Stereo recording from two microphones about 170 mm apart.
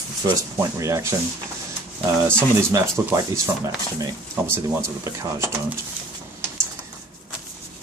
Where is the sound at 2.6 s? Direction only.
15° right (ahead or behind).